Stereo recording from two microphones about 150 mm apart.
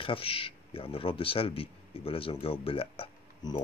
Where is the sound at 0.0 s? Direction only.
35° left (ahead or behind).